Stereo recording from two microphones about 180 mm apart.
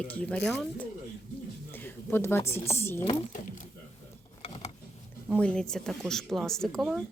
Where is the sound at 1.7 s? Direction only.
10° left (ahead or behind).